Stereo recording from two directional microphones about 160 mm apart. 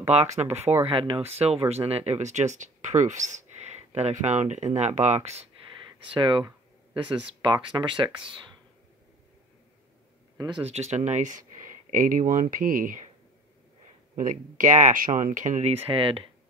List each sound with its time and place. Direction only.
0.1 s speech: 45° right (ahead or behind)
0.6 s speech: 15° right (ahead or behind)
0.8 s speech: 35° right (ahead or behind)
6.1 s speech: 30° right (ahead or behind)
7.4 s speech: 30° right (ahead or behind)
10.3 s speech: 25° right (ahead or behind)
10.6 s speech: 40° right (ahead or behind)
14.1 s speech: 55° right (ahead or behind)
15.9 s speech: 35° right (ahead or behind)